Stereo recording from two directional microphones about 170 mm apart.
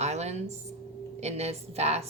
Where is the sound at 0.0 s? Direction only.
40° right (ahead or behind).